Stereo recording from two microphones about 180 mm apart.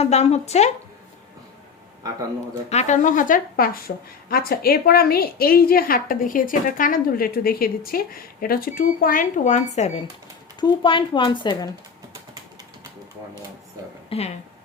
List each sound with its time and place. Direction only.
0.0 s speech: 35° left (ahead or behind)
2.6 s a woman's voice: 40° left (ahead or behind)
10.6 s speech: 25° left (ahead or behind)
14.1 s speech: 30° left (ahead or behind)